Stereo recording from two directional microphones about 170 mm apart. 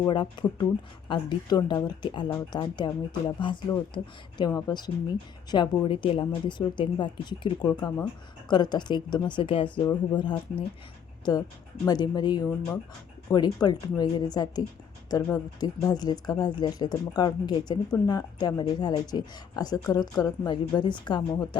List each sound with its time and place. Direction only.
0.1 s speech: 25° left (ahead or behind)
11.9 s speech: 25° left (ahead or behind)